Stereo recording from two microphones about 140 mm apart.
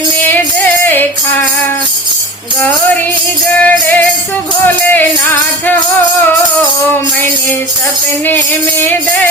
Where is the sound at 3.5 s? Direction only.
15° left (ahead or behind).